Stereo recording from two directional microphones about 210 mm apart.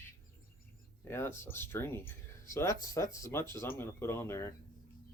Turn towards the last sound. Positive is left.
turn(degrees=15)  # may be behind; listen again after turning